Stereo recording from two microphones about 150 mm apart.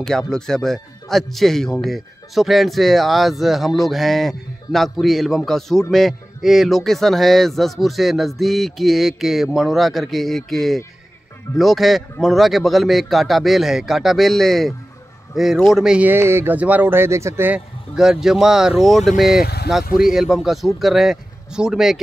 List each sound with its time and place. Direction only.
0.3 s a man's voice: 5° left (ahead or behind); by 17.6 s 15° right (ahead or behind)
17.9 s a man's voice: 5° right (ahead or behind)
19.4 s speech: 90° left
19.8 s speech: 75° left (ahead or behind)
20.1 s a man's voice: centre (ahead or behind)